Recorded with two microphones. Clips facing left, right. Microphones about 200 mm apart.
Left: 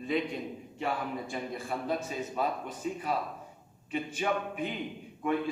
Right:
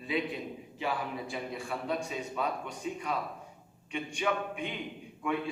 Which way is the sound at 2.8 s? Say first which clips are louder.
Left 2 dB; 45° left (ahead or behind).